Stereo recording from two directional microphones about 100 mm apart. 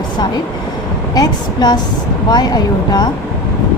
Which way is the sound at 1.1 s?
40° left (ahead or behind).